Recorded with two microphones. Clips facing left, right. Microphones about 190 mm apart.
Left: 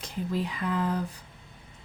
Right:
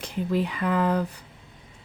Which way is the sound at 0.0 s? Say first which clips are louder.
Right 5 dB; 65° right (ahead or behind).